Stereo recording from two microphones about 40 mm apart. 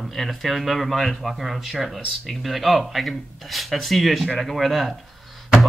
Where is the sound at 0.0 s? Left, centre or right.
Centre.